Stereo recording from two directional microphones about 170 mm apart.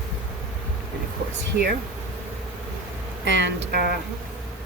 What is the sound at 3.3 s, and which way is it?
Speech, 90° right.